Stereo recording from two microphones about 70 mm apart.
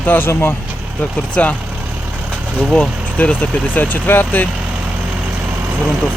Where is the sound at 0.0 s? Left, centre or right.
Left.